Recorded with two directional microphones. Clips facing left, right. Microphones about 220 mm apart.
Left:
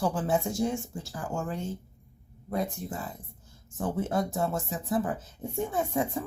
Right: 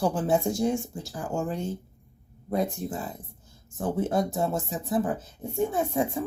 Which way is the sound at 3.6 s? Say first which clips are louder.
Right 3 dB; 15° right (ahead or behind).